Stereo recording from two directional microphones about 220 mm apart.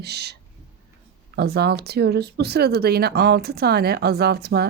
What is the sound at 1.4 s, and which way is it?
Speech, 45° right (ahead or behind).